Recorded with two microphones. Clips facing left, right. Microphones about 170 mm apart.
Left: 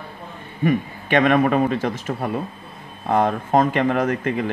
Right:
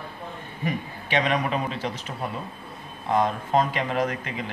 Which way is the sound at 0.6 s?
50° left (ahead or behind).